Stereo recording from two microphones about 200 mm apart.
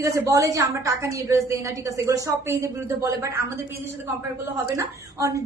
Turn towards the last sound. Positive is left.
turn(degrees=-15)  # may be behind; listen again after turning